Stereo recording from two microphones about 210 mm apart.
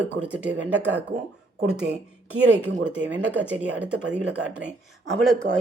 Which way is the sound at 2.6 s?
60° right (ahead or behind).